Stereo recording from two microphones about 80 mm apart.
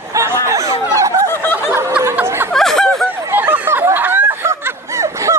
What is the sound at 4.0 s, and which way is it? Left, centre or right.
Snicker, right.